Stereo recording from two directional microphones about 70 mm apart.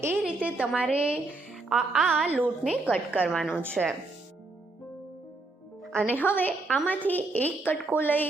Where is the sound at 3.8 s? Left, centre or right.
Centre.